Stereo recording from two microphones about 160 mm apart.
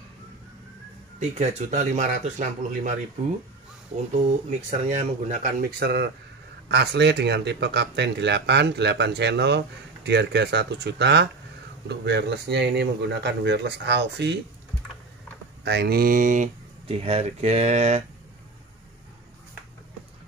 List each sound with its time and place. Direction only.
1.2 s speech: 45° right (ahead or behind)
4.8 s speech: 45° right (ahead or behind); by 14.4 s 90° right
15.6 s mantra: 90° right; by 16.4 s 55° right (ahead or behind)
16.8 s speech: 40° right (ahead or behind)